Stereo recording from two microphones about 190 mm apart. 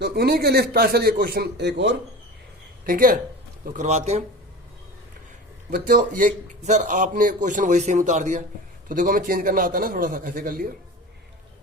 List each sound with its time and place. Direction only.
0.0 s a man's voice: 55° right (ahead or behind)
2.8 s a man's voice: 45° right (ahead or behind)
3.7 s a man's voice: 35° right (ahead or behind)
5.7 s a man's voice: 45° right (ahead or behind)